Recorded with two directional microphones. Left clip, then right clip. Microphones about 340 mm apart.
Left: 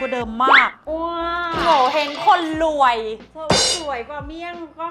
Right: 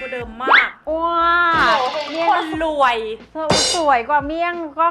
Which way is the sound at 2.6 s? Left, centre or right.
Left.